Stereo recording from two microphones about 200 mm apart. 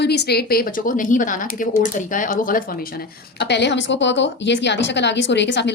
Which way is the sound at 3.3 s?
60° left (ahead or behind).